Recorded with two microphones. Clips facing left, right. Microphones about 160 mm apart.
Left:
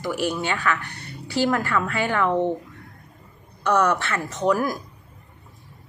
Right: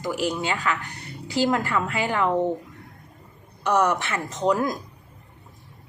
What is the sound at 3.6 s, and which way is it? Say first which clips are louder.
A woman's voice: left 1 dB; 20° right (ahead or behind).